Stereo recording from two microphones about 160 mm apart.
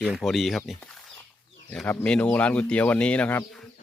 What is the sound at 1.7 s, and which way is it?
Speech, 10° left (ahead or behind).